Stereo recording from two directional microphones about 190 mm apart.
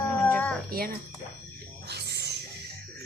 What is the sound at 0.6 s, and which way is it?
Speech, 50° right (ahead or behind).